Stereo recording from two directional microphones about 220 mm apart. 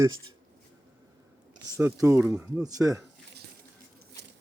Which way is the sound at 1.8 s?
10° right (ahead or behind).